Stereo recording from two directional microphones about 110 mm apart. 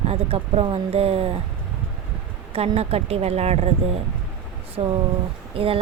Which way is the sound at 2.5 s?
65° right (ahead or behind).